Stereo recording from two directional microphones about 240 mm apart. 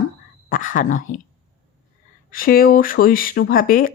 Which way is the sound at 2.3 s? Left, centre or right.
Left.